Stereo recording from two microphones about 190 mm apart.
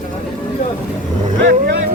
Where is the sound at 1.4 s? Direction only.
60° right (ahead or behind).